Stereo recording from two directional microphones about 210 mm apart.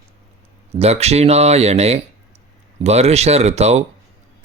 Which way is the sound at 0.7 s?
30° right (ahead or behind).